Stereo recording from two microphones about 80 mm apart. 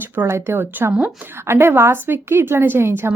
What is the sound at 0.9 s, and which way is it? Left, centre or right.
Speech, centre.